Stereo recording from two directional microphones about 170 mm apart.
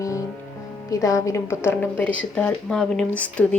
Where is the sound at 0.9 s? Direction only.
20° left (ahead or behind).